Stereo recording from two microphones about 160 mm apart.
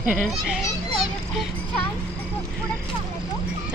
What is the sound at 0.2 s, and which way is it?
Speech, 5° right (ahead or behind).